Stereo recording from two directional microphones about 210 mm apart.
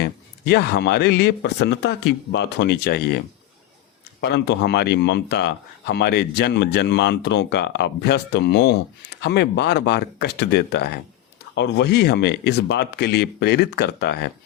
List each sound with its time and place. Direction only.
0.0 s speech: 50° left (ahead or behind)
4.2 s speech: 55° left (ahead or behind)